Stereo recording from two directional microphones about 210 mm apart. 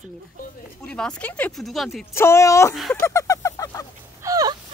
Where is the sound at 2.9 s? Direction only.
15° left (ahead or behind).